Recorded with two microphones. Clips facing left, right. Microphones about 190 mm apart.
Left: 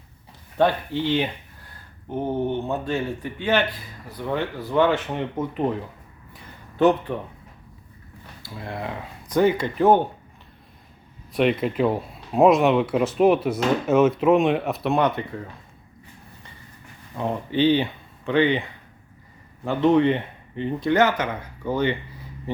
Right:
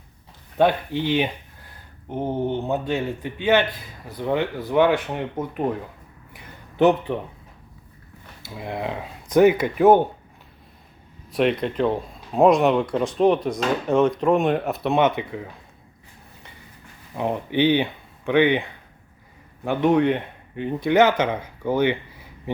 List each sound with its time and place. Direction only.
0.5 s speech: 15° right (ahead or behind)
6.3 s a sound: 20° right (ahead or behind)
8.4 s speech: 20° right (ahead or behind)
11.3 s speech: centre (ahead or behind)
17.2 s speech: 15° right (ahead or behind)
19.6 s speech: 10° right (ahead or behind)